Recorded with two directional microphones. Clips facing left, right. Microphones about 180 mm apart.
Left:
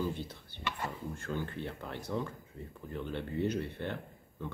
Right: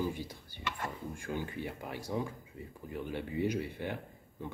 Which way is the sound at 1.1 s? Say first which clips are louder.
Even; 15° right (ahead or behind).